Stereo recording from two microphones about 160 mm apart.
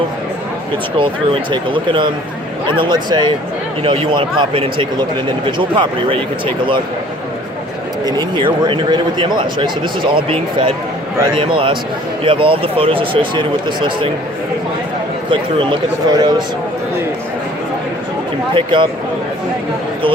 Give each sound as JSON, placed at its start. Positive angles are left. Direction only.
{"t": 0.9, "sound": "speech", "side_deg": -30}
{"t": 8.0, "sound": "speech", "side_deg": -30}
{"t": 15.3, "sound": "speech", "side_deg": -30}
{"t": 18.5, "sound": "speech", "side_deg": -30}